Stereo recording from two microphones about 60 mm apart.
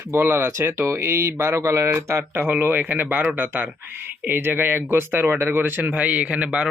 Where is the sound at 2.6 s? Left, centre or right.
Right.